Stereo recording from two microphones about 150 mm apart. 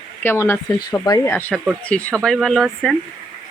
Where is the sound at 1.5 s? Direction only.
Centre (ahead or behind).